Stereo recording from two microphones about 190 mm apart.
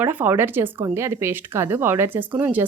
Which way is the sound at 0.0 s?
10° right (ahead or behind).